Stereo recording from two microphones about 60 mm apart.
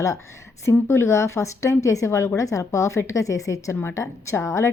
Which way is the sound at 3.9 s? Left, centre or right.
Left.